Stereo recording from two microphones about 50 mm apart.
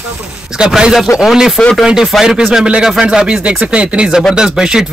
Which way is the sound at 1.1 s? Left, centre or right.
Left.